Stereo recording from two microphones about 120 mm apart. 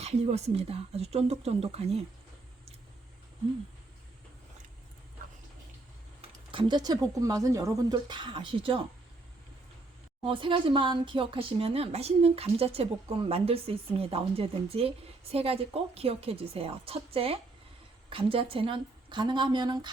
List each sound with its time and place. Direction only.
0.0 s speech: 65° right (ahead or behind)
6.5 s a woman's voice: 45° right (ahead or behind)
10.2 s a woman's voice: 45° right (ahead or behind)